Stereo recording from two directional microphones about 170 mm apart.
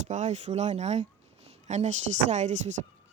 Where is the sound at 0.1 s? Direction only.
45° right (ahead or behind).